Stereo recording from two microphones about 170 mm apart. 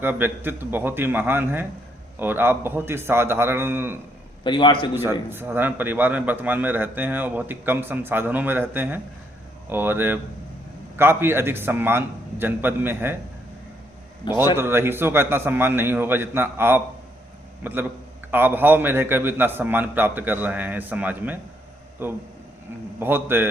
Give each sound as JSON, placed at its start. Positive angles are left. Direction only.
{"t": 0.0, "sound": "a man's voice", "side_deg": -10}
{"t": 4.4, "sound": "a man's voice", "side_deg": 25}
{"t": 5.3, "sound": "a man's voice", "side_deg": -10}
{"t": 14.5, "sound": "a man's voice", "side_deg": -15}